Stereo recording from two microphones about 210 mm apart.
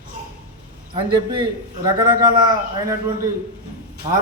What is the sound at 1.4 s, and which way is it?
A man's voice, 20° right (ahead or behind).